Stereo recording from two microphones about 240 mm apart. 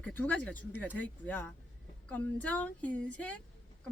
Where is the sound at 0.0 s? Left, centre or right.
Centre.